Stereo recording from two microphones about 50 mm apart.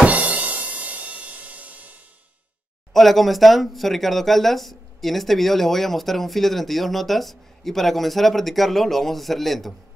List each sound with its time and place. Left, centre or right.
0.0 s music: right
2.9 s speech: centre